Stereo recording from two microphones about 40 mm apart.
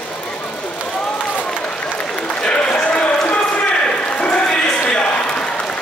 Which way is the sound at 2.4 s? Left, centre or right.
Left.